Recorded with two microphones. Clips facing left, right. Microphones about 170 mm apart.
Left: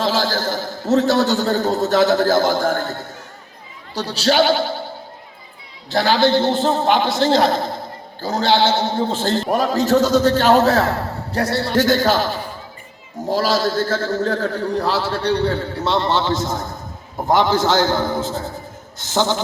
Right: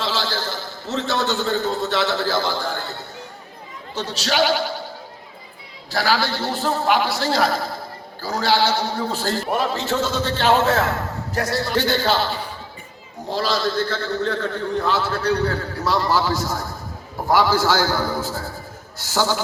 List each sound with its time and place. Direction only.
0.0 s a man's voice: 45° left (ahead or behind)
3.9 s a man's voice: 35° left (ahead or behind)
5.9 s a man's voice: 25° left (ahead or behind)
9.5 s a man's voice: 40° left (ahead or behind)
11.8 s a man's voice: 45° left (ahead or behind); by 19.4 s 20° left (ahead or behind)